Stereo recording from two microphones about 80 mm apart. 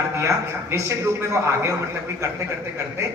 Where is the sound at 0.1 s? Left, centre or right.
Right.